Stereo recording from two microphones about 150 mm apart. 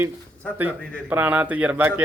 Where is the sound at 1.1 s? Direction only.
10° right (ahead or behind).